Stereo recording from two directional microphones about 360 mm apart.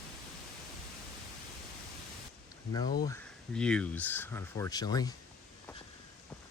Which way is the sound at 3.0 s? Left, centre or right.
Centre.